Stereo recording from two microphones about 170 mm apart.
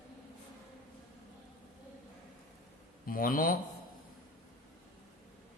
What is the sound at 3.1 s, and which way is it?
Speech, 55° left (ahead or behind).